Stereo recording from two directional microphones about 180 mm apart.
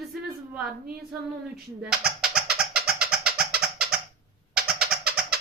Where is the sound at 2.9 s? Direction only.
5° right (ahead or behind).